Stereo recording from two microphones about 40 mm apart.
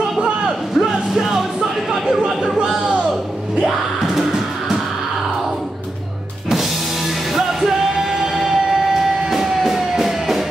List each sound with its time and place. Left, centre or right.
0.7 s music: centre
2.2 s a sound: centre
3.6 s music: centre
7.3 s music: centre